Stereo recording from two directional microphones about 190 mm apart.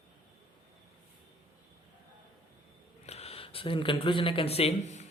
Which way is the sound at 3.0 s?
35° left (ahead or behind).